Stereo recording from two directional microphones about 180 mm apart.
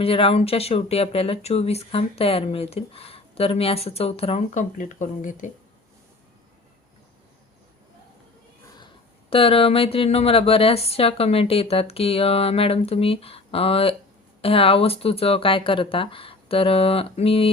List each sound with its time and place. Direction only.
0.0 s speech: 30° left (ahead or behind)
9.3 s speech: 30° left (ahead or behind)